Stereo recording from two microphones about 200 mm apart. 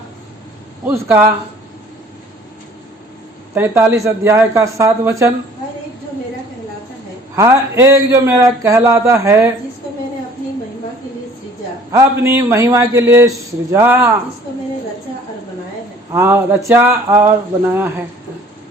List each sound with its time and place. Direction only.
0.9 s speech: 10° right (ahead or behind)
3.5 s speech: 10° right (ahead or behind)
7.3 s speech: 15° right (ahead or behind)
11.9 s speech: 15° right (ahead or behind)
16.1 s speech: 10° right (ahead or behind)